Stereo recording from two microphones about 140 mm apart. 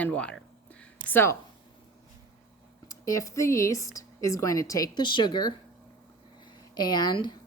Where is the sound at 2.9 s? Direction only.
20° left (ahead or behind).